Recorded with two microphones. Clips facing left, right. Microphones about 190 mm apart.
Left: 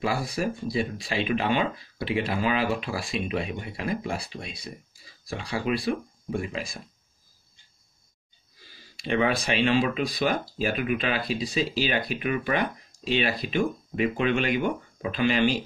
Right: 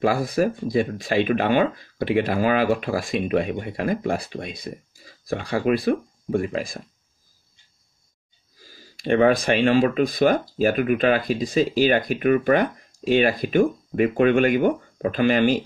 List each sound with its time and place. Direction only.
0.0 s speech: 50° right (ahead or behind)
8.5 s speech: 40° right (ahead or behind)